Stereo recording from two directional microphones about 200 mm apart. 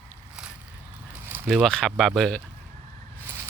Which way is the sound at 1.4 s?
Centre (ahead or behind).